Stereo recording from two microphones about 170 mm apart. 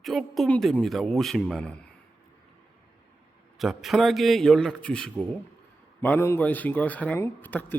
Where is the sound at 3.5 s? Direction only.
Centre (ahead or behind).